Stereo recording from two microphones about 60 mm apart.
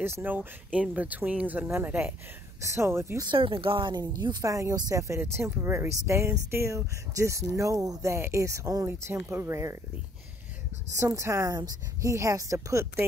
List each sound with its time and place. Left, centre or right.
0.0 s speech: right
2.6 s speech: right
3.2 s speech: right
5.2 s speech: right
5.9 s speech: right
8.8 s speech: right
11.0 s speech: right